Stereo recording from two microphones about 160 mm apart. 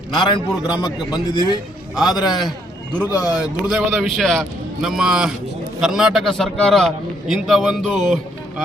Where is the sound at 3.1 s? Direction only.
20° left (ahead or behind).